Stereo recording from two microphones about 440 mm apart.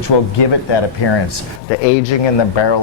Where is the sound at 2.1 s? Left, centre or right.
Left.